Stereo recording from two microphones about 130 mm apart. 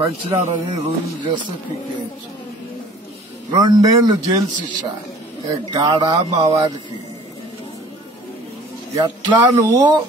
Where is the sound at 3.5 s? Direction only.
30° right (ahead or behind).